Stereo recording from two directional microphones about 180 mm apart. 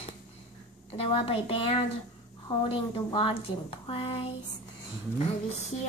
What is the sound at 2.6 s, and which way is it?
A woman's voice, 30° left (ahead or behind).